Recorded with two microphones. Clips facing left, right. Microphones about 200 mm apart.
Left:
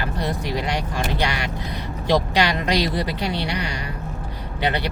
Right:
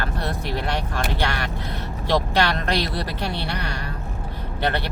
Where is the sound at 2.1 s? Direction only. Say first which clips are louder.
Left 1 dB; 15° left (ahead or behind).